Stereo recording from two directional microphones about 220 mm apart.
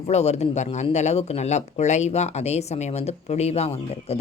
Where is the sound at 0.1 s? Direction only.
30° left (ahead or behind).